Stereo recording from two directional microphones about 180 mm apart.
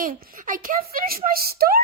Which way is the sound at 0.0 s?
50° right (ahead or behind).